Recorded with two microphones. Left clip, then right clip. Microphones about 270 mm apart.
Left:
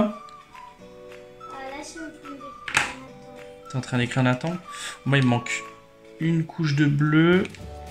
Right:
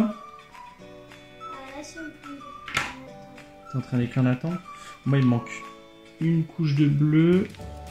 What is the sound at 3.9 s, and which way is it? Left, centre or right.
Speech, left.